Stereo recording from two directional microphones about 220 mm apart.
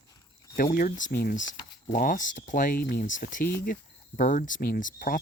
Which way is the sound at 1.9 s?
40° left (ahead or behind).